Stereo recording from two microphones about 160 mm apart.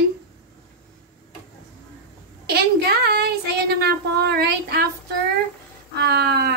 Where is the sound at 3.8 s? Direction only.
85° right.